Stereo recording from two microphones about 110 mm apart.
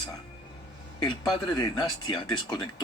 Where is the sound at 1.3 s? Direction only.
40° left (ahead or behind).